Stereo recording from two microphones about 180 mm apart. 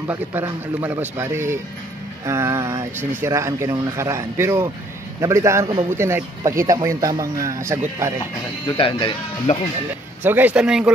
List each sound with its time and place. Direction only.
0.0 s speech: 10° right (ahead or behind)
8.6 s speech: 30° left (ahead or behind)
10.2 s speech: 10° right (ahead or behind)